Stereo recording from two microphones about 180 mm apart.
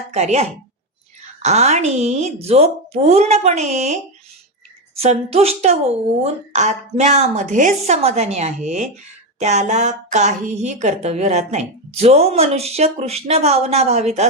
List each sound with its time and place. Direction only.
0.1 s a woman's voice: 35° right (ahead or behind)